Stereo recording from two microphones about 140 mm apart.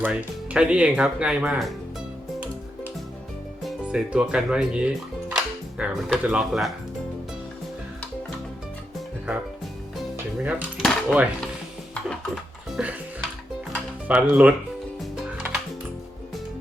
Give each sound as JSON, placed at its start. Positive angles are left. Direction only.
{"t": 0.0, "sound": "speech", "side_deg": -5}
{"t": 3.6, "sound": "speech", "side_deg": -5}
{"t": 5.3, "sound": "music", "side_deg": -5}
{"t": 6.2, "sound": "speech", "side_deg": -5}
{"t": 10.0, "sound": "dishes", "side_deg": -5}
{"t": 12.0, "sound": "music", "side_deg": -5}
{"t": 14.1, "sound": "speech", "side_deg": -10}
{"t": 15.1, "sound": "music", "side_deg": -5}